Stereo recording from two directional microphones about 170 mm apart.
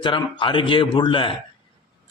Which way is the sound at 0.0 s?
30° left (ahead or behind).